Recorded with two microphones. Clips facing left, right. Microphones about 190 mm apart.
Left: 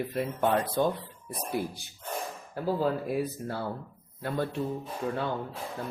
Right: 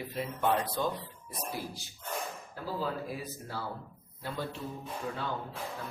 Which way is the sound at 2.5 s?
60° left (ahead or behind).